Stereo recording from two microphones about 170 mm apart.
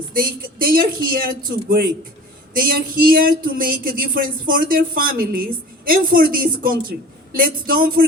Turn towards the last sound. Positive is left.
turn(degrees=-60)  # may be behind; listen again after turning